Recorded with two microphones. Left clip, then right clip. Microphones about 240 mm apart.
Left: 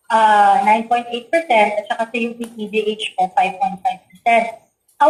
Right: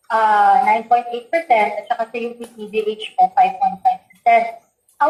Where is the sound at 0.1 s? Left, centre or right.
Left.